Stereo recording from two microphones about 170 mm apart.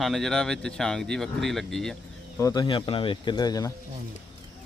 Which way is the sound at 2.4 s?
20° left (ahead or behind).